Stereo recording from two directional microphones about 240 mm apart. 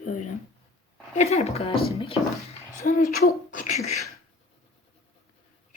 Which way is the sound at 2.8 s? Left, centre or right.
Left.